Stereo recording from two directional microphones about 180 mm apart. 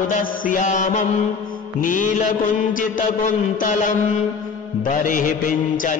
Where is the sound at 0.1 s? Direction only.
50° left (ahead or behind).